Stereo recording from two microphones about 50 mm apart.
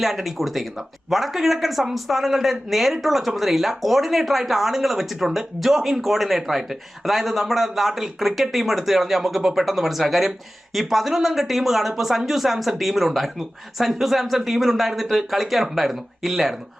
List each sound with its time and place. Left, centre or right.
0.0 s speech: centre